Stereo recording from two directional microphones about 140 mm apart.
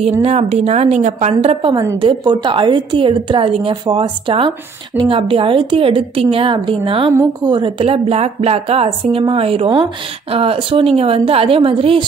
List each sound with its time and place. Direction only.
0.2 s a woman's voice: 50° right (ahead or behind)